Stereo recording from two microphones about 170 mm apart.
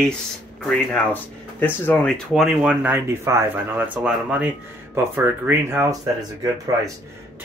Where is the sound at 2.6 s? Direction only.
10° right (ahead or behind).